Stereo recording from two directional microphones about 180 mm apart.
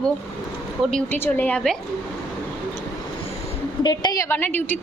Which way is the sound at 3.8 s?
25° left (ahead or behind).